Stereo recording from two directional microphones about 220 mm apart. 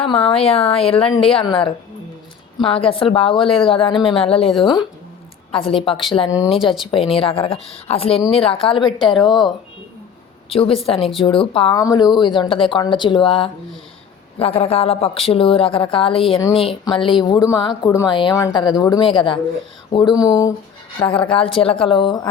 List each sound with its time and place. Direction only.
0.0 s speech: 25° left (ahead or behind)
9.2 s speech: centre (ahead or behind)
10.5 s speech: 25° left (ahead or behind)